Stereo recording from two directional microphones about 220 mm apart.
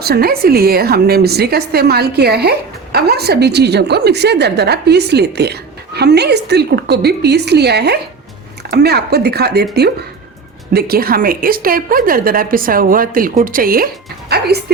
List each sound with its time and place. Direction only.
0.0 s a woman's voice: 45° right (ahead or behind)
10.8 s a woman's voice: 45° right (ahead or behind)